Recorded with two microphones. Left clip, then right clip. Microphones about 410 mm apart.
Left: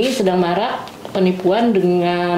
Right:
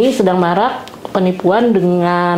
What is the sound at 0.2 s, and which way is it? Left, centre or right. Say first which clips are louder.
A woman's voice: right 4 dB; right.